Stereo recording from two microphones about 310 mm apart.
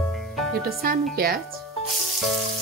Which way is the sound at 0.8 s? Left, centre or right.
Right.